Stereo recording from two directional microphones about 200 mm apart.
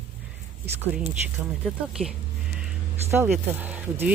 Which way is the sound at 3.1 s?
10° right (ahead or behind).